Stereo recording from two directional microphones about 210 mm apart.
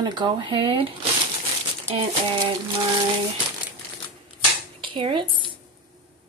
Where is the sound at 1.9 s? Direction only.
25° right (ahead or behind).